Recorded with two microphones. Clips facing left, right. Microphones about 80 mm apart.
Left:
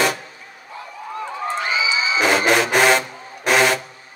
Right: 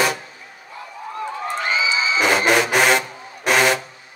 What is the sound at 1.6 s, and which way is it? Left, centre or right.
Crowd, right.